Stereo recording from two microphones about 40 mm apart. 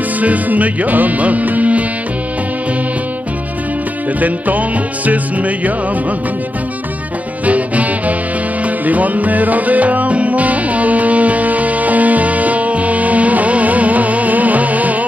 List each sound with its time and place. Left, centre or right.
0.2 s music: right
4.2 s music: right
7.4 s music: right